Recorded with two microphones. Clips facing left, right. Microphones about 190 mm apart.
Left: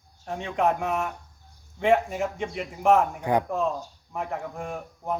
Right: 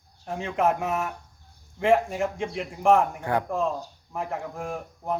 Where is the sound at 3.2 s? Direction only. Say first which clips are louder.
Left 2 dB; 15° left (ahead or behind).